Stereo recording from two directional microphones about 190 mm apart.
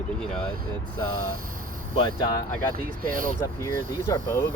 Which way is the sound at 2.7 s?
45° right (ahead or behind).